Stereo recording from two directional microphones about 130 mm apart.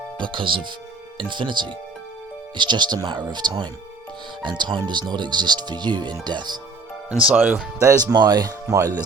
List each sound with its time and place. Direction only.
0.2 s speech: 40° right (ahead or behind)
7.1 s speech: 10° right (ahead or behind); by 9.0 s 30° right (ahead or behind)